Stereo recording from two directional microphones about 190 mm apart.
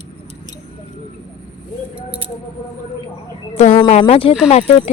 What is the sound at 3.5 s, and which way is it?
Speech, 35° left (ahead or behind).